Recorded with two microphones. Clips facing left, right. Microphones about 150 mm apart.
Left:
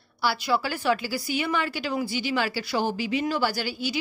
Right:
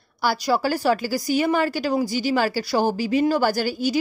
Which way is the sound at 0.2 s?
45° right (ahead or behind).